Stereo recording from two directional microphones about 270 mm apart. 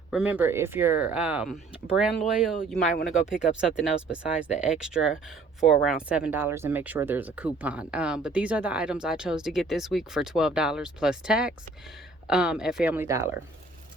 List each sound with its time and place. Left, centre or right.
0.1 s speech: centre
2.8 s speech: left
3.8 s speech: centre